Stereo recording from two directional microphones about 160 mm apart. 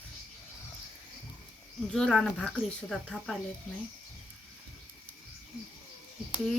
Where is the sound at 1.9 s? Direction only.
Centre (ahead or behind).